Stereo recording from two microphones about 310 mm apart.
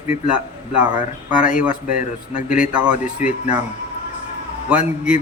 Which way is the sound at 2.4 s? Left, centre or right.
Centre.